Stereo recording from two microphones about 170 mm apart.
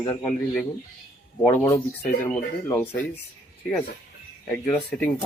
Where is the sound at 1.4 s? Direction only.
10° left (ahead or behind).